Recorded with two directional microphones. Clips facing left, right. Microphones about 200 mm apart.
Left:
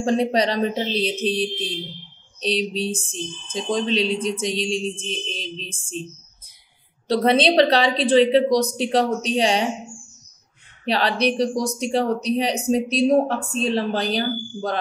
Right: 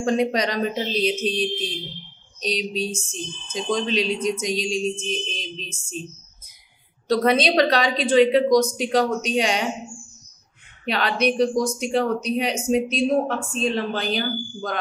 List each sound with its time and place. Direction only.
0.0 s speech: 30° left (ahead or behind)
7.1 s speech: 30° left (ahead or behind)
10.9 s speech: 35° left (ahead or behind)